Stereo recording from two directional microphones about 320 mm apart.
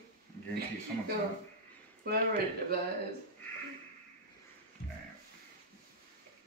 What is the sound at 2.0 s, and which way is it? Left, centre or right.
Speech, right.